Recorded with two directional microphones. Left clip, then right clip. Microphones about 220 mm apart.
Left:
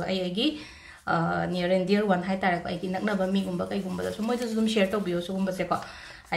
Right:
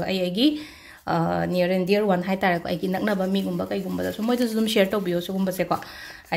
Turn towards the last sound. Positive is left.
turn(degrees=-40)  # may be behind; listen again after turning